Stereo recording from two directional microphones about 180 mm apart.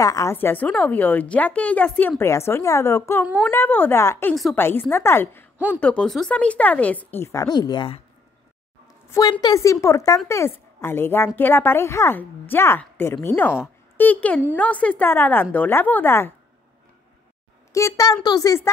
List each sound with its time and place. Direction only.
0.0 s a woman's voice: 20° left (ahead or behind)
4.3 s a woman's voice: centre (ahead or behind)
4.6 s a woman's voice: 10° left (ahead or behind)
9.1 s a woman's voice: 20° left (ahead or behind)
17.7 s a woman's voice: 20° left (ahead or behind)